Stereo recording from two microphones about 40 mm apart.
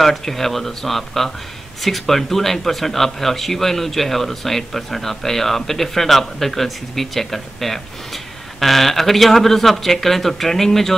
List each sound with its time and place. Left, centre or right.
0.0 s a man's voice: centre